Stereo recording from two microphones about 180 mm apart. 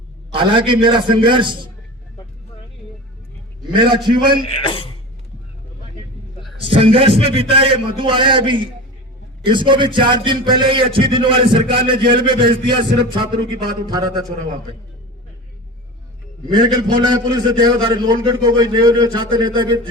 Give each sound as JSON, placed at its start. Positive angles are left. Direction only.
{"t": 0.3, "sound": "a man's voice", "side_deg": -30}
{"t": 3.7, "sound": "a man's voice", "side_deg": -25}
{"t": 4.4, "sound": "a man's voice", "side_deg": 30}
{"t": 6.7, "sound": "a man's voice", "side_deg": -30}
{"t": 16.5, "sound": "a man's voice", "side_deg": -25}